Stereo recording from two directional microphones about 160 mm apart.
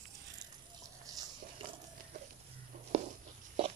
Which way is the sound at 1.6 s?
35° right (ahead or behind).